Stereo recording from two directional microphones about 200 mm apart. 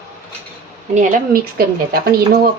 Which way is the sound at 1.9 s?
50° right (ahead or behind).